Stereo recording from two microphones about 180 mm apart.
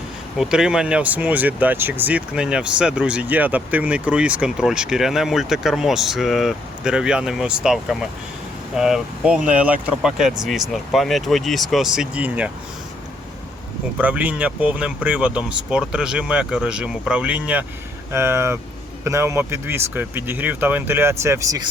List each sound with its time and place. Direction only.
0.3 s speech: 5° right (ahead or behind)
14.0 s speech: 10° right (ahead or behind)